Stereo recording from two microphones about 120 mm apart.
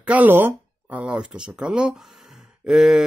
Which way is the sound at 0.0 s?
15° right (ahead or behind).